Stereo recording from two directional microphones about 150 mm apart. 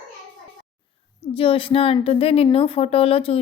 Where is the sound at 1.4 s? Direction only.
35° left (ahead or behind).